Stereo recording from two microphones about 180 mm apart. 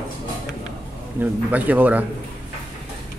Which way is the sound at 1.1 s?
10° right (ahead or behind).